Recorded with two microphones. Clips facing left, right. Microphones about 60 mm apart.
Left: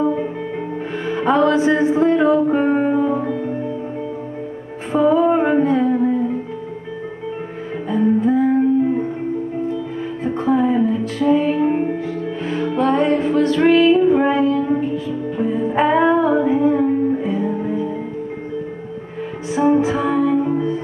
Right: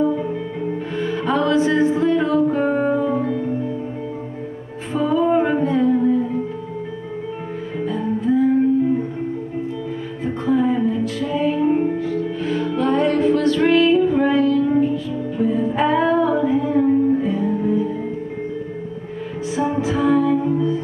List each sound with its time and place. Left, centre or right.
0.9 s music: left
4.9 s music: left
7.9 s music: left
10.2 s music: left
11.1 s music: left
19.8 s music: left